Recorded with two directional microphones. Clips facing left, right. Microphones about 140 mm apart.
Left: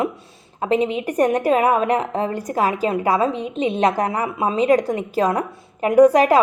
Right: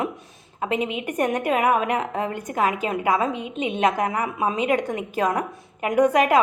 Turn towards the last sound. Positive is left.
turn(degrees=35)  # may be behind; listen again after turning